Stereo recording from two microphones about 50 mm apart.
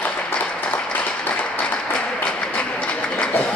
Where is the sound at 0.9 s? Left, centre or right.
Left.